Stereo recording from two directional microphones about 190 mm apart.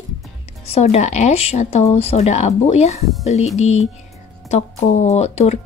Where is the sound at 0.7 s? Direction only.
35° left (ahead or behind).